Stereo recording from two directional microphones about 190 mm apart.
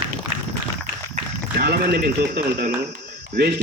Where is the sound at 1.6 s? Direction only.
55° right (ahead or behind).